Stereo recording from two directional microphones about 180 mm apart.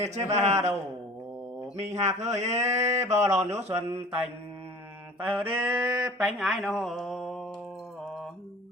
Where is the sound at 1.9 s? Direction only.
40° right (ahead or behind).